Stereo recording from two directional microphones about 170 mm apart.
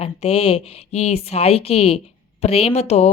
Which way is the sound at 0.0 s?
35° left (ahead or behind).